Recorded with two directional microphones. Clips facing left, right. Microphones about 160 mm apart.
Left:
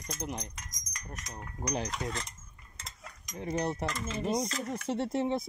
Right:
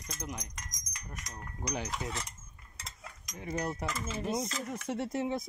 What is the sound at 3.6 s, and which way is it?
Speech, 25° left (ahead or behind).